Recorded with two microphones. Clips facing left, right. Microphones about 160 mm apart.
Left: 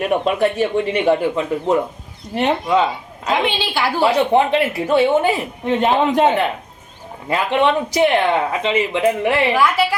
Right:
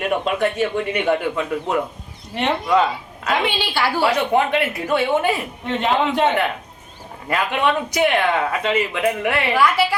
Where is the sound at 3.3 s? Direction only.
15° left (ahead or behind).